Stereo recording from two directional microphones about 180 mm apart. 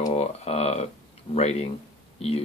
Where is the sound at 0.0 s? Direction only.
35° left (ahead or behind).